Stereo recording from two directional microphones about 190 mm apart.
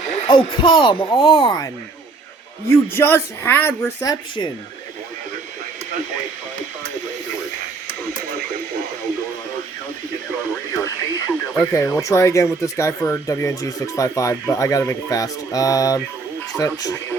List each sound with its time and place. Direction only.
0.0 s speech: 35° left (ahead or behind)
2.6 s speech: 10° left (ahead or behind)
10.8 s speech: 10° left (ahead or behind)